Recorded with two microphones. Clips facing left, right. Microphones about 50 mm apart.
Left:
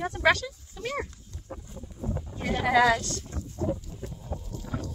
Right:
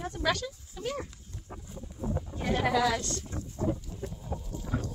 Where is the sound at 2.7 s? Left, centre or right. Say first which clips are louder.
Left 6 dB; centre.